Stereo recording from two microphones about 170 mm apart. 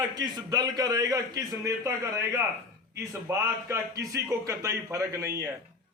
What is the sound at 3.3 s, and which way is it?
A man's voice, 15° right (ahead or behind).